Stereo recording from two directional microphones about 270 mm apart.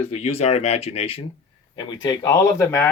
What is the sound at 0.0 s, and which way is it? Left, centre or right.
Speech, left.